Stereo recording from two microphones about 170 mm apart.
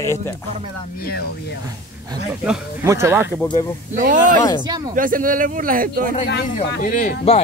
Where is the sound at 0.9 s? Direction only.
65° left (ahead or behind).